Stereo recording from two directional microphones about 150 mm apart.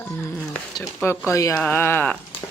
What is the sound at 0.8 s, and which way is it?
Speech, 20° left (ahead or behind).